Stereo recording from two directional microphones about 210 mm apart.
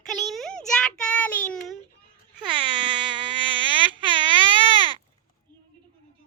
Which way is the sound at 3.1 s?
25° right (ahead or behind).